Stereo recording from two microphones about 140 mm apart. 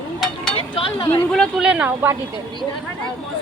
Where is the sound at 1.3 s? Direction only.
Centre (ahead or behind).